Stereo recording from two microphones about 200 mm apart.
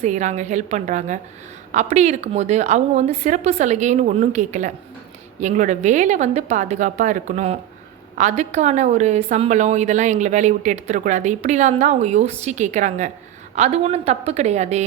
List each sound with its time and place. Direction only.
0.0 s a woman's voice: 35° right (ahead or behind)